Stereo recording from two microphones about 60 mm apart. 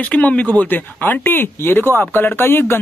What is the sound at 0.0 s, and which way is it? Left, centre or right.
Speech, left.